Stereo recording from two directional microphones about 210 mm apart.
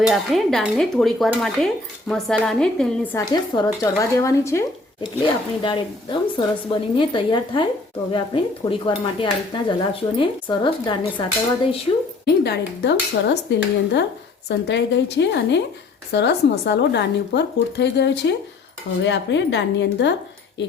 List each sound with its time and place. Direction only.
0.0 s dishes: centre (ahead or behind)
2.0 s speech: centre (ahead or behind)
5.2 s dishes: 25° left (ahead or behind)
12.2 s speech: 50° left (ahead or behind)